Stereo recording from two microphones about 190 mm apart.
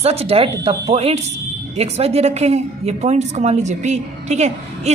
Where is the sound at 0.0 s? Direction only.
30° right (ahead or behind).